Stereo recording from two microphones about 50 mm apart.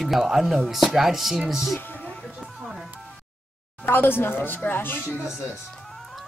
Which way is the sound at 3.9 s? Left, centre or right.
Left.